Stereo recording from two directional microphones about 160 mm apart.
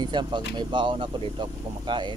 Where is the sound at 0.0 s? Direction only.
25° right (ahead or behind).